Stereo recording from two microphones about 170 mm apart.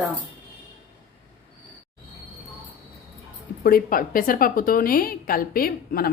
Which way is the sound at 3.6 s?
60° left (ahead or behind).